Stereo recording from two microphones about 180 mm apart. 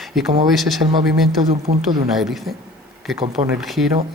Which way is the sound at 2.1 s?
Centre (ahead or behind).